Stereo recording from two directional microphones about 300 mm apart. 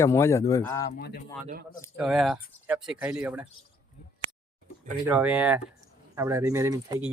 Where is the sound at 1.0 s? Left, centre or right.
Left.